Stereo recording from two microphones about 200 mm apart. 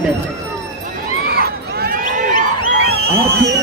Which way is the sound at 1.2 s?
50° right (ahead or behind).